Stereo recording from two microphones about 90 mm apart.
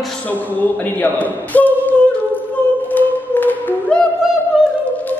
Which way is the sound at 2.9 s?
20° left (ahead or behind).